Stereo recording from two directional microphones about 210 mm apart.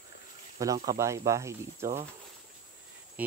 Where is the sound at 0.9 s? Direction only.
15° right (ahead or behind).